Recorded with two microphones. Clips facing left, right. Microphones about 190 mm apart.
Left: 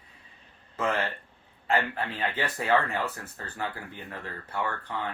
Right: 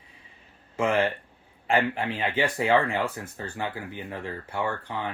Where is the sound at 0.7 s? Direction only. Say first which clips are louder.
Right 5 dB; 10° right (ahead or behind).